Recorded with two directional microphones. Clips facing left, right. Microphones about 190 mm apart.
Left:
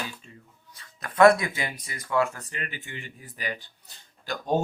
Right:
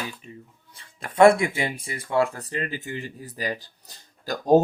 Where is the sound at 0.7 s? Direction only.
25° right (ahead or behind).